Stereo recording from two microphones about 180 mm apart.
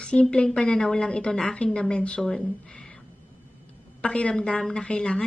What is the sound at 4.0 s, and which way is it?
A woman's voice, 5° left (ahead or behind).